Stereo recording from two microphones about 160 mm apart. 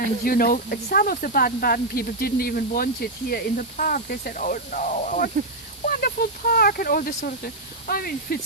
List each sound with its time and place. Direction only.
0.3 s speech: 65° left (ahead or behind)
5.8 s speech: 65° left (ahead or behind)